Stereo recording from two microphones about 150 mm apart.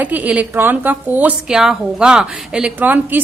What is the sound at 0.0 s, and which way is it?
A woman's voice, 10° right (ahead or behind).